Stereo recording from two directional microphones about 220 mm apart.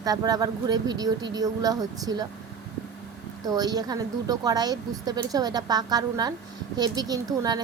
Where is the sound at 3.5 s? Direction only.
15° right (ahead or behind).